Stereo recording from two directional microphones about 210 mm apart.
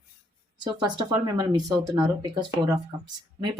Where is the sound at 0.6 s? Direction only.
20° right (ahead or behind).